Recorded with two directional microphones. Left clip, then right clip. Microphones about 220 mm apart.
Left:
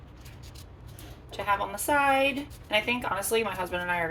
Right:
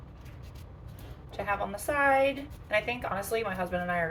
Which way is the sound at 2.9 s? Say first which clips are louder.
Left 4 dB; 35° left (ahead or behind).